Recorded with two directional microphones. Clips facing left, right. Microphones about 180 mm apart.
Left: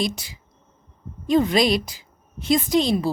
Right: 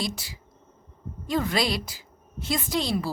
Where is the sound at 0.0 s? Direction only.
20° left (ahead or behind).